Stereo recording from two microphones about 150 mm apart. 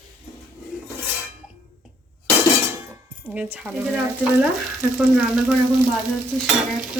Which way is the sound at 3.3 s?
10° right (ahead or behind).